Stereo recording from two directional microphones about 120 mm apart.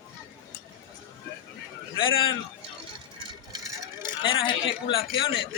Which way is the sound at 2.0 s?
45° left (ahead or behind).